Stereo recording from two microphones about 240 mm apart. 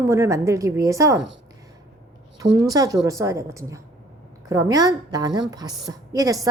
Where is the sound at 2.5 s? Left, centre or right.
Centre.